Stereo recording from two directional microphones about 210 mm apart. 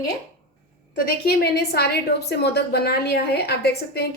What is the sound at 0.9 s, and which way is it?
A woman's voice, 50° left (ahead or behind).